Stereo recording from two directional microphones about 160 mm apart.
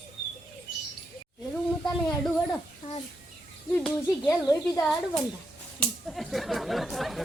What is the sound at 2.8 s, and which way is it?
Speech, 45° left (ahead or behind).